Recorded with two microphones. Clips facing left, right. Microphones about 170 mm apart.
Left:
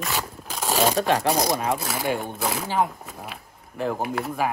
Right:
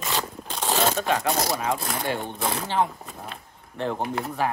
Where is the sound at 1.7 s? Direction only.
5° left (ahead or behind).